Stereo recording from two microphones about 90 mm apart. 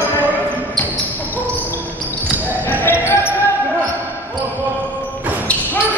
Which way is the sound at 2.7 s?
20° left (ahead or behind).